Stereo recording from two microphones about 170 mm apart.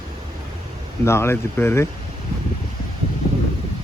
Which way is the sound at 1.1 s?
15° left (ahead or behind).